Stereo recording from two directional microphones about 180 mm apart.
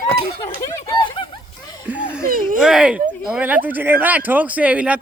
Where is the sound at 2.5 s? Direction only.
5° right (ahead or behind).